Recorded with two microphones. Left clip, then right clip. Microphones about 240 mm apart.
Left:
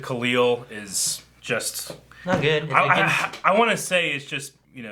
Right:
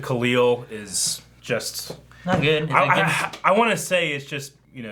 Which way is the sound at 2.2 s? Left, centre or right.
Left.